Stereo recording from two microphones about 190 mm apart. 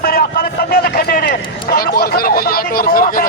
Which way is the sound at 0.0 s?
50° left (ahead or behind).